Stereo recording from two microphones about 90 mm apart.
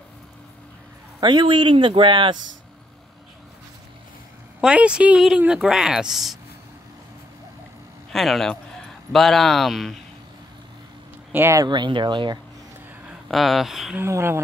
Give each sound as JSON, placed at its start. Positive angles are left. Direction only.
{"t": 1.2, "sound": "speech", "side_deg": -60}
{"t": 4.6, "sound": "a woman's voice", "side_deg": -10}
{"t": 8.1, "sound": "speech", "side_deg": 0}
{"t": 11.3, "sound": "speech", "side_deg": -30}
{"t": 11.6, "sound": "speech", "side_deg": -55}
{"t": 13.3, "sound": "speech", "side_deg": 0}
{"t": 13.9, "sound": "speech", "side_deg": -30}